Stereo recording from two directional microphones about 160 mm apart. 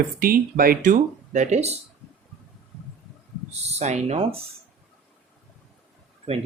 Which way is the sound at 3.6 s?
40° right (ahead or behind).